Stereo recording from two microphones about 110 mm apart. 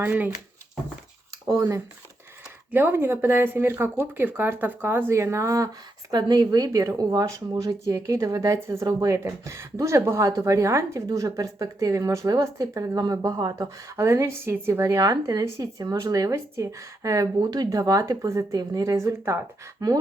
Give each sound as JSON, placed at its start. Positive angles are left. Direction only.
{"t": 0.0, "sound": "speech", "side_deg": -15}
{"t": 1.5, "sound": "speech", "side_deg": -30}